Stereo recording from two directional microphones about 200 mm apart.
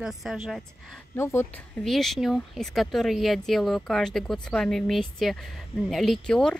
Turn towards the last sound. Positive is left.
turn(degrees=0)  # may be behind; listen again after turning